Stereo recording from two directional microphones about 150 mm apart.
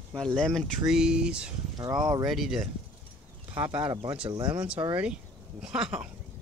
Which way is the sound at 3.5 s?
10° right (ahead or behind).